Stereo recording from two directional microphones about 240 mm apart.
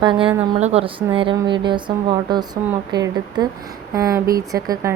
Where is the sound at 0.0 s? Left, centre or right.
Right.